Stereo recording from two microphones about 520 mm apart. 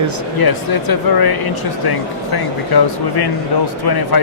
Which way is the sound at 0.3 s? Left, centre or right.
Left.